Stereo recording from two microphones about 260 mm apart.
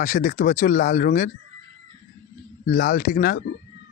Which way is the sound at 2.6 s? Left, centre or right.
Left.